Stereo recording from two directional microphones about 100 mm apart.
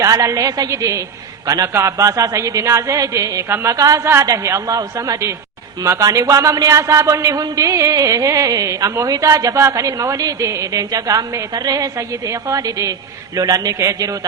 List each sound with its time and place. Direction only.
0.0 s a man's voice: 35° right (ahead or behind)